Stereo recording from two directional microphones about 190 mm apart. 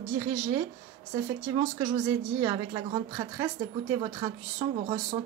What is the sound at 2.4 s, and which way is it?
A woman's voice, 20° right (ahead or behind).